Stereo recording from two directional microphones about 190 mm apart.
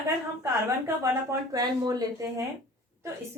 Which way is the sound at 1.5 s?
20° right (ahead or behind).